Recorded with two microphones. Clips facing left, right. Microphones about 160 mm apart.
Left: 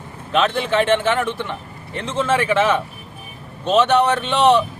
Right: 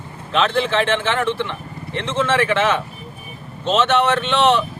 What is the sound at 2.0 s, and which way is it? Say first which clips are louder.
Speech: right 1 dB; 35° left (ahead or behind).